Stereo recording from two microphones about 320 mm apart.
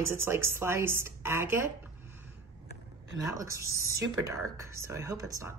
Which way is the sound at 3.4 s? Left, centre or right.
Centre.